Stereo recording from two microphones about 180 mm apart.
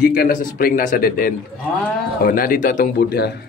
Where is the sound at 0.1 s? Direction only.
55° left (ahead or behind).